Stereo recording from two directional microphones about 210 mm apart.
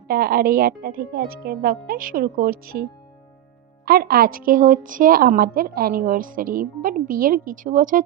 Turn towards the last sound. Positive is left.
turn(degrees=-40)  # may be behind; listen again after turning